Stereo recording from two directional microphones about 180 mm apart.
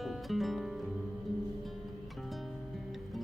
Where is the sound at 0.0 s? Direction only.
Centre (ahead or behind).